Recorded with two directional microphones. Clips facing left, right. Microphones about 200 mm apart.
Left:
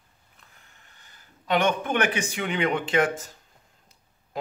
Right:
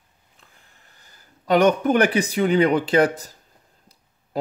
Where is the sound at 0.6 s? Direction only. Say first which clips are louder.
Right 1 dB; 35° right (ahead or behind).